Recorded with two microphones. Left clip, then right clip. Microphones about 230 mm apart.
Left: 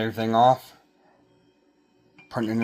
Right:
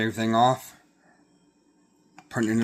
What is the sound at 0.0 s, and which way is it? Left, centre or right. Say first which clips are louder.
Speech: left 2 dB; right.